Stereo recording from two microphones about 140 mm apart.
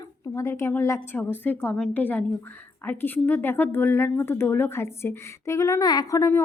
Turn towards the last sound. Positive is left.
turn(degrees=20)  # may be behind; listen again after turning